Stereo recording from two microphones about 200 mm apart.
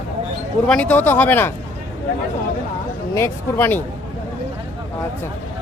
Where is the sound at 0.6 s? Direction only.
5° left (ahead or behind).